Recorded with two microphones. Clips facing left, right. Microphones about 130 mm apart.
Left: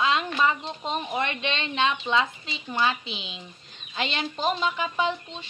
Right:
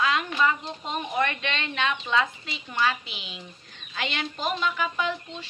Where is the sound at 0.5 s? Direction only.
25° left (ahead or behind).